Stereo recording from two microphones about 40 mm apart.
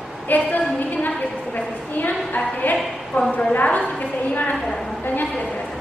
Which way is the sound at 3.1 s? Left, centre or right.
Left.